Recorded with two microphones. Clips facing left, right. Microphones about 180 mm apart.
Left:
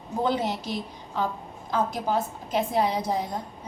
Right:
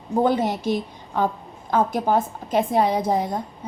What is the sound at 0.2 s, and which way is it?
A woman's voice, 55° right (ahead or behind).